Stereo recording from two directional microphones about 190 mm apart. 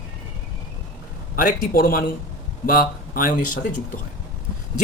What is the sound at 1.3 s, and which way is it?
Speech, 50° left (ahead or behind).